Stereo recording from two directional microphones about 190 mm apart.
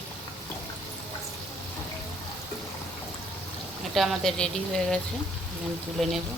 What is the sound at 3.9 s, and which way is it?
Speech, centre (ahead or behind).